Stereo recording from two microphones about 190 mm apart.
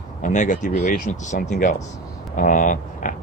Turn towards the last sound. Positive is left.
turn(degrees=45)  # may be behind; listen again after turning